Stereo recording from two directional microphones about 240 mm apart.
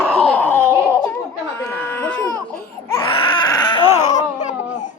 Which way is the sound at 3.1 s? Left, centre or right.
Left.